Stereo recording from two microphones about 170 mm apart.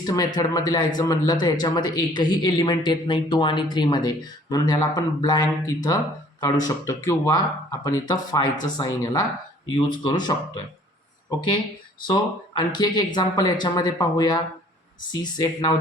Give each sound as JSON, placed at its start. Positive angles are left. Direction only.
{"t": 0.0, "sound": "a man's voice", "side_deg": 20}